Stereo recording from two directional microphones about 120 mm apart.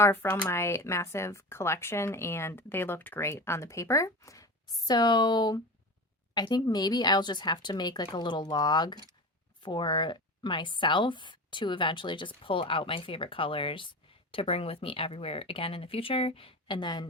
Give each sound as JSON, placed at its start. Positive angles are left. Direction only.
{"t": 0.0, "sound": "speech", "side_deg": 20}